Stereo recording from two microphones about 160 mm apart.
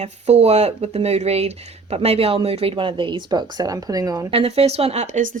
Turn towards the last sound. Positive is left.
turn(degrees=-55)  # may be behind; listen again after turning